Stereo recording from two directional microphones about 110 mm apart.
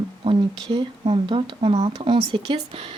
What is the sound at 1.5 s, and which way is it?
Speech, 60° right (ahead or behind).